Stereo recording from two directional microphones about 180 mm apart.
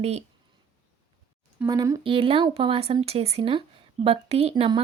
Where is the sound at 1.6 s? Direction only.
20° right (ahead or behind).